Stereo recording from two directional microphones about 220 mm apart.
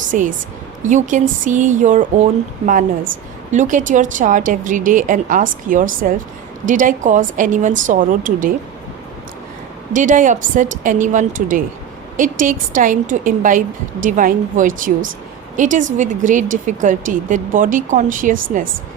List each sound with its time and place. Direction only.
0.1 s a woman's voice: 35° right (ahead or behind)
9.9 s a woman's voice: 35° right (ahead or behind)